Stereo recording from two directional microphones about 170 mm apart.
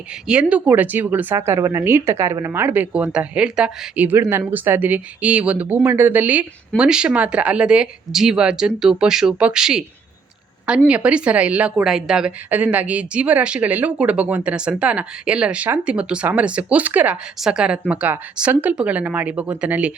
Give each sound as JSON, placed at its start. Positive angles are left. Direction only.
{"t": 0.3, "sound": "a woman's voice", "side_deg": -5}
{"t": 10.8, "sound": "a woman's voice", "side_deg": -5}